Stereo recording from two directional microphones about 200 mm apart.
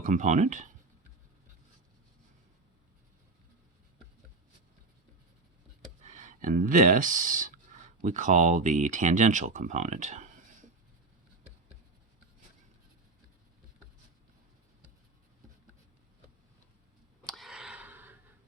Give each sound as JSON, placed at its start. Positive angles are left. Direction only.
{"t": 0.0, "sound": "speech", "side_deg": -40}
{"t": 6.0, "sound": "speech", "side_deg": -35}
{"t": 17.3, "sound": "a sound", "side_deg": 0}